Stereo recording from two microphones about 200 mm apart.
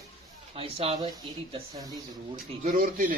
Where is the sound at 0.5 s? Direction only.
30° right (ahead or behind).